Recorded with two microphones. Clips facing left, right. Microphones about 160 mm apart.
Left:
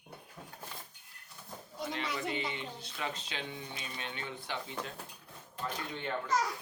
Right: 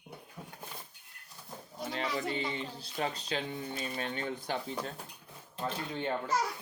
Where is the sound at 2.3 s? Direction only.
35° right (ahead or behind).